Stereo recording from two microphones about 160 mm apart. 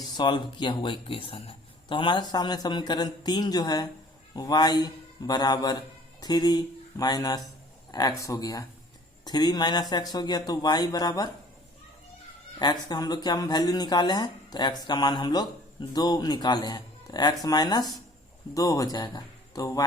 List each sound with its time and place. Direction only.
0.2 s speech: 30° left (ahead or behind)
12.5 s speech: 25° left (ahead or behind)